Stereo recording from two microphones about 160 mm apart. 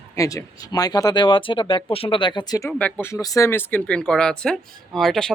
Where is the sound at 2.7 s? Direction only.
10° left (ahead or behind).